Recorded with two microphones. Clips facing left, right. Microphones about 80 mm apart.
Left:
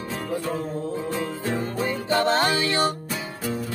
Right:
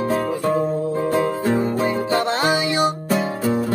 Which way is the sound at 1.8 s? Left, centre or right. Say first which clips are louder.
Right 3 dB; right.